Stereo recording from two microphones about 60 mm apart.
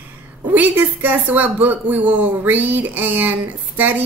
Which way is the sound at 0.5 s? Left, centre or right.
Right.